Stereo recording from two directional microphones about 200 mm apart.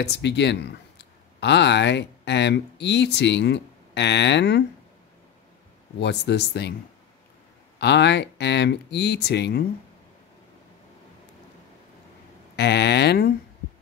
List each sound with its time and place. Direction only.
0.0 s speech: 60° left (ahead or behind)
5.9 s speech: 60° left (ahead or behind)
7.8 s speech: 60° left (ahead or behind)
12.5 s speech: 55° left (ahead or behind)